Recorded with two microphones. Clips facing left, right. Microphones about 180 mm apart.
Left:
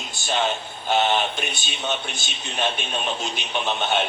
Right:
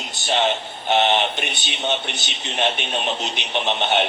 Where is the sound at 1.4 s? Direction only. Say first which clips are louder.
Right 1 dB; 70° right (ahead or behind).